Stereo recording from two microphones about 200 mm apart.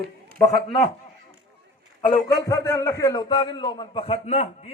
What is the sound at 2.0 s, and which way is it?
A man's voice, 20° left (ahead or behind).